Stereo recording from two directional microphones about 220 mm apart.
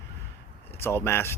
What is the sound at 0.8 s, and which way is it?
Speech, 10° left (ahead or behind).